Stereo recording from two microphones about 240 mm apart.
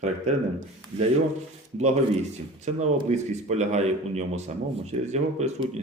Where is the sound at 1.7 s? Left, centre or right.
Right.